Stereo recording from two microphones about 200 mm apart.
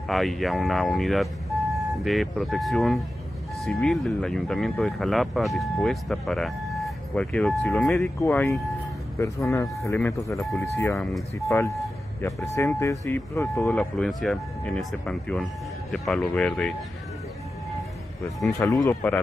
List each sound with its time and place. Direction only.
0.1 s speech: centre (ahead or behind)
9.2 s speech: 15° left (ahead or behind)
11.0 s speech: centre (ahead or behind)
11.5 s speech: 15° left (ahead or behind)
18.6 s speech: 15° left (ahead or behind)